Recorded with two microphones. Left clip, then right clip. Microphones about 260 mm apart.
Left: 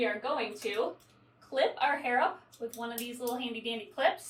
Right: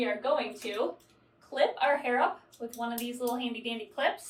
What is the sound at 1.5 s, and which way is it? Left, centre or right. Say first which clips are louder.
A woman's voice: right 2 dB; centre.